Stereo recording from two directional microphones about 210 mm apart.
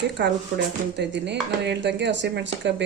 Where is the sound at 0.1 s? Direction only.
55° right (ahead or behind).